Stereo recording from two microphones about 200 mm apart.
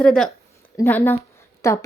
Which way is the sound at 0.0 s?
Centre (ahead or behind).